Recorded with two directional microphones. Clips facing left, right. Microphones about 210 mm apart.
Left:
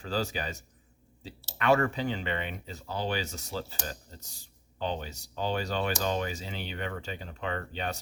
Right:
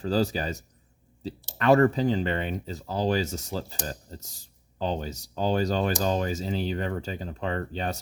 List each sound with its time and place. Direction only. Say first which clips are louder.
0.0 s speech: right 7 dB; 40° right (ahead or behind)